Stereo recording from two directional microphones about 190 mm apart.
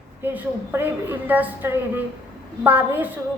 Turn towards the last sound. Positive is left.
turn(degrees=-10)  # may be behind; listen again after turning